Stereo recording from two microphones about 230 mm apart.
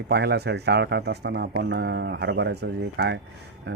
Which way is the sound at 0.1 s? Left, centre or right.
Right.